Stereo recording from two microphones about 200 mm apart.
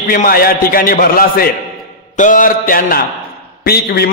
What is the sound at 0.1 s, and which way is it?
A man's voice, 45° left (ahead or behind).